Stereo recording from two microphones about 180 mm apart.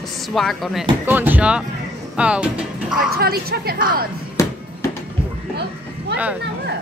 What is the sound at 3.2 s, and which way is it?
Speech, 60° right (ahead or behind).